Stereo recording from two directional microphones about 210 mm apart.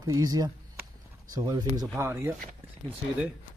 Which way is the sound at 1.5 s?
20° right (ahead or behind).